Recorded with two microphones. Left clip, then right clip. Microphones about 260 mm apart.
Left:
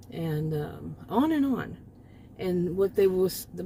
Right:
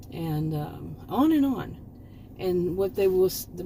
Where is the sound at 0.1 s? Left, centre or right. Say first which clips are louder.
Even; left.